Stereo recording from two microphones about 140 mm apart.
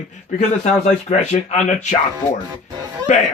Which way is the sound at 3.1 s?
55° left (ahead or behind).